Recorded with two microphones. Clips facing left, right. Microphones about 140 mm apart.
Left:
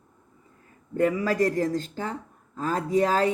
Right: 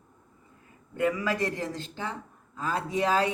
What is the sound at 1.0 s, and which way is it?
Speech, 40° left (ahead or behind).